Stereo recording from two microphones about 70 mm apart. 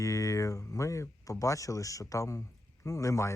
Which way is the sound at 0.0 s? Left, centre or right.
Left.